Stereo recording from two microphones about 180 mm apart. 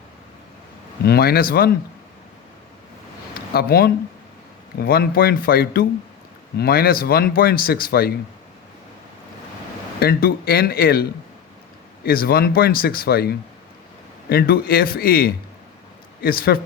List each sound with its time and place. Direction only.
1.0 s speech: 60° left (ahead or behind)
3.5 s speech: 60° left (ahead or behind)
10.0 s speech: 55° left (ahead or behind)
12.0 s speech: 55° left (ahead or behind)